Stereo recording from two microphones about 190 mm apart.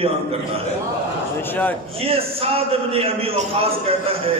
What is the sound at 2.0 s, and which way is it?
A man's voice, 30° right (ahead or behind).